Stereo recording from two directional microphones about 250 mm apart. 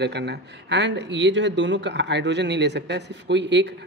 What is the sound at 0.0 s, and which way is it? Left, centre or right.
Speech, right.